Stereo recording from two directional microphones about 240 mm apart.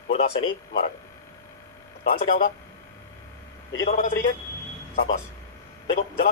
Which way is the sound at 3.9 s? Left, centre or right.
Left.